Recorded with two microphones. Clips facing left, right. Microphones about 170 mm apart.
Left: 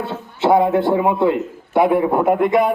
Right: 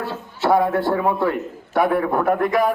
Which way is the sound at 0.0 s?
20° left (ahead or behind).